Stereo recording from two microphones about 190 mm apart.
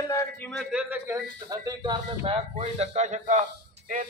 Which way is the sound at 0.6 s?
5° right (ahead or behind).